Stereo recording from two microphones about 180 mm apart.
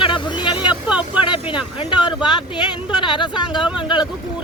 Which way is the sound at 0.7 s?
5° right (ahead or behind).